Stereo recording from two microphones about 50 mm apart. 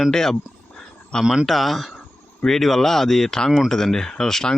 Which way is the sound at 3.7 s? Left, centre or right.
Centre.